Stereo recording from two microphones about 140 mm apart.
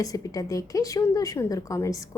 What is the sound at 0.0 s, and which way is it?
A woman's voice, 25° left (ahead or behind).